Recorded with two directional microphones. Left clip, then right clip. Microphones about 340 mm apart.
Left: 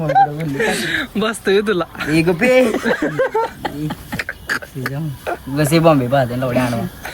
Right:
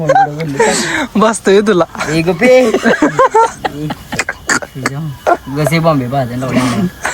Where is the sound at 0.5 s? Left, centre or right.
Centre.